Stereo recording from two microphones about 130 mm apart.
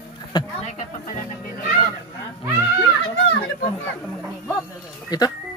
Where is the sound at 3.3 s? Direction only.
15° left (ahead or behind).